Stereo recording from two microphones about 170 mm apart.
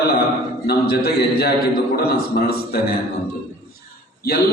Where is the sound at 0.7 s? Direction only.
65° left (ahead or behind).